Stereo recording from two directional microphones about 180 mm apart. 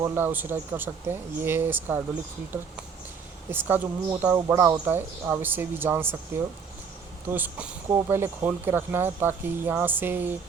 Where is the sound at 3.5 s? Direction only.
10° right (ahead or behind).